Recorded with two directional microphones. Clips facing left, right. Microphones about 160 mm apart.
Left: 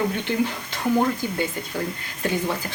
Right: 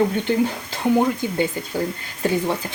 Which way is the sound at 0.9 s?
20° right (ahead or behind).